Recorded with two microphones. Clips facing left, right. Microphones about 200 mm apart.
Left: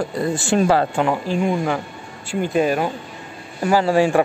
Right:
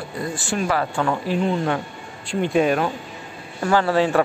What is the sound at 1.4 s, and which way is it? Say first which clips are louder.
Speech: left 1 dB; 5° left (ahead or behind).